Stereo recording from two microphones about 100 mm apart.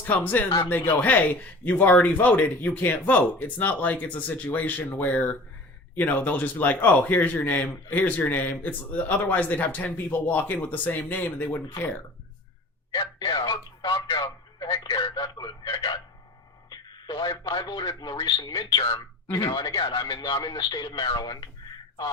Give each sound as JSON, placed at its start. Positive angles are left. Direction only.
{"t": 0.0, "sound": "a man's voice", "side_deg": 15}
{"t": 12.9, "sound": "speech", "side_deg": 45}
{"t": 14.2, "sound": "a sound", "side_deg": 45}
{"t": 14.8, "sound": "speech", "side_deg": 55}
{"t": 18.9, "sound": "speech", "side_deg": 35}